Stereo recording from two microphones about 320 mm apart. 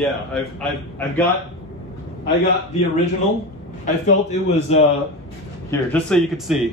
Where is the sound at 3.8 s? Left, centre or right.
Left.